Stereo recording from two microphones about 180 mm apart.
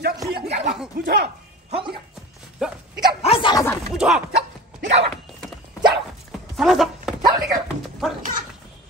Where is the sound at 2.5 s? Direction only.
5° right (ahead or behind).